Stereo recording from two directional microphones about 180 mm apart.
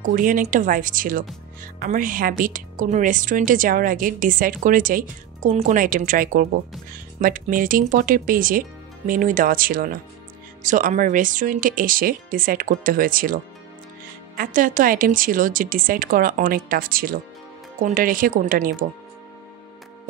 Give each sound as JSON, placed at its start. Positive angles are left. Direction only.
{"t": 0.0, "sound": "a woman's voice", "side_deg": -50}